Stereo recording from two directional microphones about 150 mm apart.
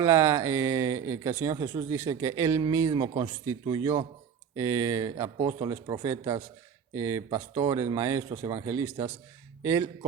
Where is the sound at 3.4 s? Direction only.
20° right (ahead or behind).